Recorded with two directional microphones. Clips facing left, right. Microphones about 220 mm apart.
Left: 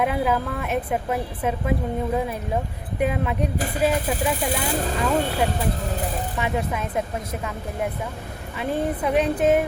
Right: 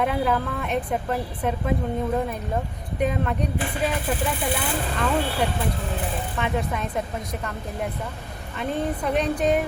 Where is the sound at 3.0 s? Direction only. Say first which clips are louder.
Left 1 dB; 5° left (ahead or behind).